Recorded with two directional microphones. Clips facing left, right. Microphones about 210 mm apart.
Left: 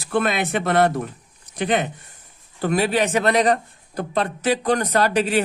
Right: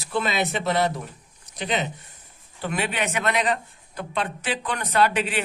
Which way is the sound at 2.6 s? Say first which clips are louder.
Left 7 dB; 40° left (ahead or behind).